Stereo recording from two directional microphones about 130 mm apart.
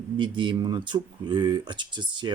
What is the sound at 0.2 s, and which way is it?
Speech, 35° right (ahead or behind).